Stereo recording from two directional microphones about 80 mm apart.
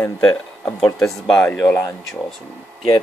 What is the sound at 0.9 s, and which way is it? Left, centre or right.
Speech, centre.